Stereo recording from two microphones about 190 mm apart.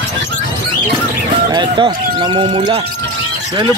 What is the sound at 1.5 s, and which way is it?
Speech, 25° right (ahead or behind).